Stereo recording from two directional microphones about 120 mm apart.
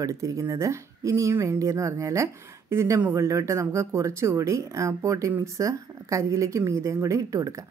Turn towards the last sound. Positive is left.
turn(degrees=-25)  # may be behind; listen again after turning